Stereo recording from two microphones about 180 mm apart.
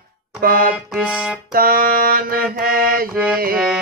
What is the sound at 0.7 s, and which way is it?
Music, 5° right (ahead or behind).